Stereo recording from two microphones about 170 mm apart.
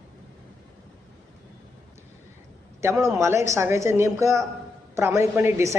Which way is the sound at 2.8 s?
15° right (ahead or behind).